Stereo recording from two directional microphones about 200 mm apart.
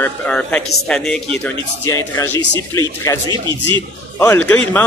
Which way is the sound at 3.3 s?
25° right (ahead or behind).